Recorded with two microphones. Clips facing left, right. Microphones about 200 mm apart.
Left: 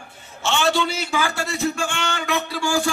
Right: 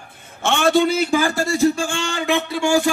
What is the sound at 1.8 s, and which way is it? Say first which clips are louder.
A man's voice: right 3 dB; 30° right (ahead or behind).